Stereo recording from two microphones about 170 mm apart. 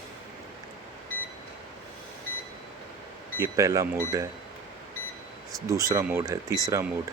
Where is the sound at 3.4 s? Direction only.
20° right (ahead or behind).